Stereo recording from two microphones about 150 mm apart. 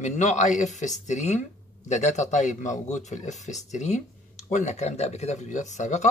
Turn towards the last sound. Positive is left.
turn(degrees=50)  # may be behind; listen again after turning